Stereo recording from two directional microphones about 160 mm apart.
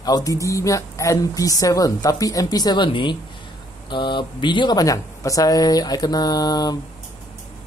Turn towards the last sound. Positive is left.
turn(degrees=25)  # may be behind; listen again after turning